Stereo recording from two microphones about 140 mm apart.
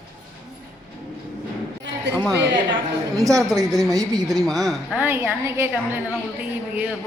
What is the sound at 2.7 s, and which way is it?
Speech, 25° right (ahead or behind).